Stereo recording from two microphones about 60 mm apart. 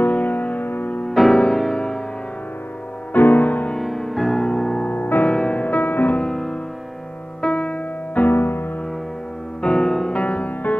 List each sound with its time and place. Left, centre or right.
0.0 s music: left
1.1 s music: centre
3.1 s music: left
3.7 s music: centre
4.9 s music: left
5.3 s music: centre
6.2 s music: centre
7.4 s music: centre; by 8.6 s left
9.6 s music: centre
10.2 s music: left